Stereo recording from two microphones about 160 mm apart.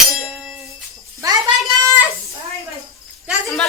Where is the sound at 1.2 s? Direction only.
25° right (ahead or behind).